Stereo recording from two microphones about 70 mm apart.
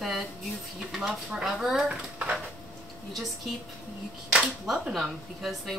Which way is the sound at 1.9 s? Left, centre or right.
Centre.